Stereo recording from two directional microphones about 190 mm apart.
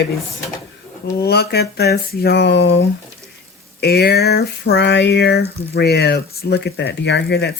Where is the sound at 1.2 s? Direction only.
55° left (ahead or behind).